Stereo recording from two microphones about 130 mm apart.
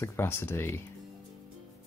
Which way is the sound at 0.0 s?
20° left (ahead or behind).